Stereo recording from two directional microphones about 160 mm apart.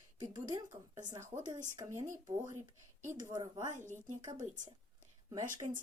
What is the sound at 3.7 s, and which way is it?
Speech, 50° right (ahead or behind).